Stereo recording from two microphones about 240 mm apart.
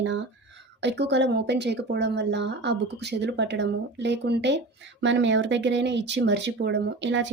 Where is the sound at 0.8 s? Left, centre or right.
Right.